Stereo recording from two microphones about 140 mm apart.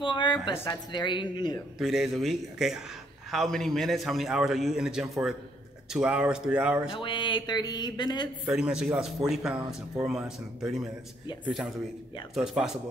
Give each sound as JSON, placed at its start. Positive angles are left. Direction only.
{"t": 0.0, "sound": "speech", "side_deg": 35}
{"t": 1.8, "sound": "a man's voice", "side_deg": 0}
{"t": 6.9, "sound": "speech", "side_deg": 35}
{"t": 8.5, "sound": "a man's voice", "side_deg": -5}